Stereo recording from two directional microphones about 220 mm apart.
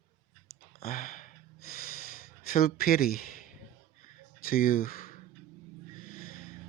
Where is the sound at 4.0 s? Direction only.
40° left (ahead or behind).